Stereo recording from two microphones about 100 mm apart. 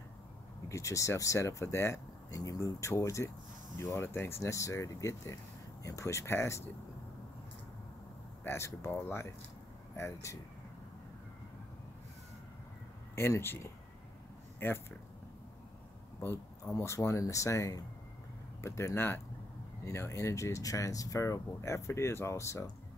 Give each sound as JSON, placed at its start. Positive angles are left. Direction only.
{"t": 0.7, "sound": "speech", "side_deg": 30}
{"t": 8.5, "sound": "speech", "side_deg": 25}
{"t": 13.1, "sound": "speech", "side_deg": 25}
{"t": 16.2, "sound": "speech", "side_deg": 25}